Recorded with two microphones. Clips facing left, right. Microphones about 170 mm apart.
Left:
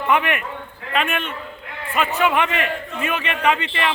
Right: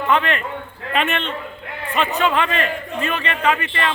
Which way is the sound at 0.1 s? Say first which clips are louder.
Even; 15° left (ahead or behind).